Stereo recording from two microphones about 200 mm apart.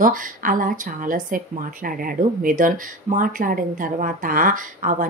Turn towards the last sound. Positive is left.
turn(degrees=-40)  # may be behind; listen again after turning